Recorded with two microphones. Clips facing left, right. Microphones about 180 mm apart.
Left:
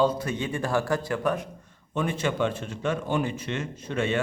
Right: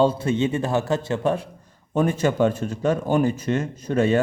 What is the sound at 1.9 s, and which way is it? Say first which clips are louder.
Speech: right 6 dB; 40° right (ahead or behind).